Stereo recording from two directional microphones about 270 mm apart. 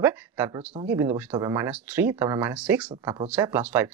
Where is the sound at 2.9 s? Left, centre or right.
Centre.